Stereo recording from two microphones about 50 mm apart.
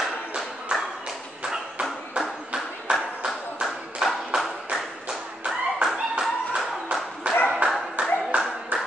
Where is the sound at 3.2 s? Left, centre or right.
Centre.